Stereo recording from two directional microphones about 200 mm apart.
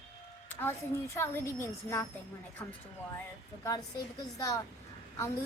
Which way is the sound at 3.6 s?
20° left (ahead or behind).